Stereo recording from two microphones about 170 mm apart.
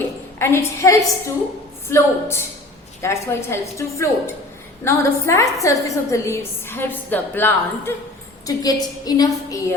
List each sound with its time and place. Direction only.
0.3 s a woman's voice: 15° left (ahead or behind)